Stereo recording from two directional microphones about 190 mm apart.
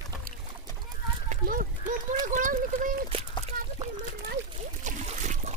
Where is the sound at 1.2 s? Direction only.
45° right (ahead or behind).